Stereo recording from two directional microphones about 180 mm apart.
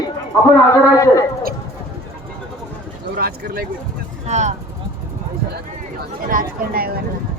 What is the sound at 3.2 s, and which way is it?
Speech, 60° right (ahead or behind).